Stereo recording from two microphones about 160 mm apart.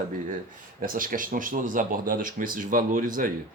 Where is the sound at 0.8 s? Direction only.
60° right (ahead or behind).